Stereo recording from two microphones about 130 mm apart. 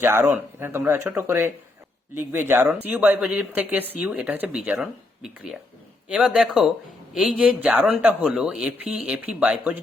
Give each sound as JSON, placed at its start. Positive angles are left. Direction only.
{"t": 0.0, "sound": "speech", "side_deg": -15}